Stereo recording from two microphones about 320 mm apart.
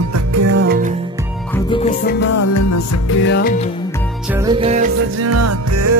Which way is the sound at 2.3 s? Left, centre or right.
Left.